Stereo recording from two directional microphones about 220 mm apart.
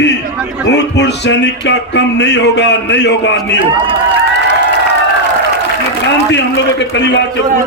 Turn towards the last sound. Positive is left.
turn(degrees=50)  # may be behind; listen again after turning